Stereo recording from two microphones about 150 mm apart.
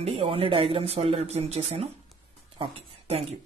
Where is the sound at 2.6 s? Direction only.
40° right (ahead or behind).